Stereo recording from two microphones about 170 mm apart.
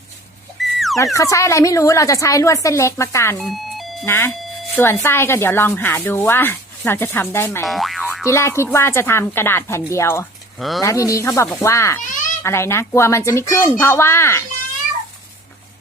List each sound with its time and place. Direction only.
0.6 s a sound: centre (ahead or behind)
0.9 s speech: 20° left (ahead or behind)
3.3 s alarm clock: centre (ahead or behind)
4.0 s speech: 15° left (ahead or behind)
7.6 s boing: centre (ahead or behind)
8.2 s speech: 15° left (ahead or behind)